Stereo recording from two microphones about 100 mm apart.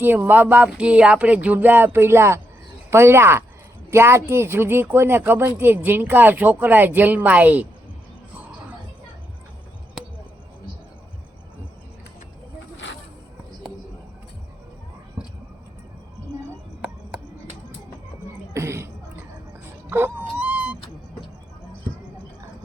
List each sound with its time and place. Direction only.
0.0 s speech: 20° right (ahead or behind)
18.5 s cough: 25° right (ahead or behind)
19.9 s dog: 20° right (ahead or behind)